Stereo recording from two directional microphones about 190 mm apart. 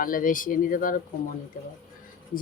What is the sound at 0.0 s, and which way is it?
A woman's voice, 45° left (ahead or behind).